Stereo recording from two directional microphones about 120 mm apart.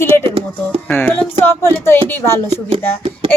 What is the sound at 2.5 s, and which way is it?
Speech, 55° right (ahead or behind).